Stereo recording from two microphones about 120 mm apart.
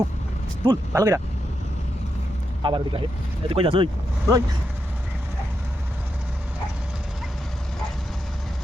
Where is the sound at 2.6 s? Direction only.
45° right (ahead or behind).